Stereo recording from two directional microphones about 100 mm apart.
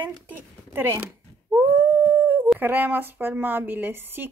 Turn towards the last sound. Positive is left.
turn(degrees=-20)  # may be behind; listen again after turning